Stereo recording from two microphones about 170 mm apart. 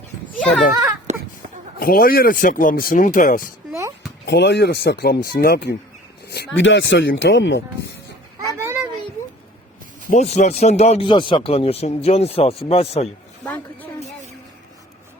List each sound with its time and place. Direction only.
0.3 s children playing: 5° left (ahead or behind)
1.1 s a sound: 45° right (ahead or behind)
1.8 s speech: 60° left (ahead or behind)
4.3 s speech: 90° left
8.4 s children playing: 15° right (ahead or behind)
10.1 s speech: 40° left (ahead or behind)
13.4 s a sound: 10° left (ahead or behind)